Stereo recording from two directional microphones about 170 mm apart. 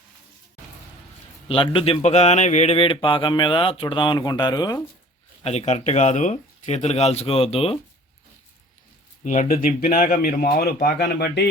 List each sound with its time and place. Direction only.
1.5 s speech: 30° left (ahead or behind)
5.4 s speech: 40° left (ahead or behind)
9.2 s speech: 45° left (ahead or behind); by 11.4 s 70° left (ahead or behind)